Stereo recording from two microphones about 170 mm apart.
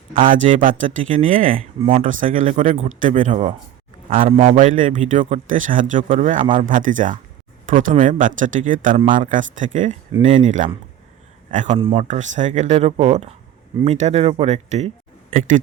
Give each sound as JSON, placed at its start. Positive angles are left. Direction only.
{"t": 0.4, "sound": "speech", "side_deg": -50}
{"t": 2.6, "sound": "speech", "side_deg": -35}
{"t": 3.0, "sound": "speech", "side_deg": -50}
{"t": 4.3, "sound": "speech", "side_deg": -35}
{"t": 11.8, "sound": "speech", "side_deg": -30}
{"t": 12.0, "sound": "speech", "side_deg": -45}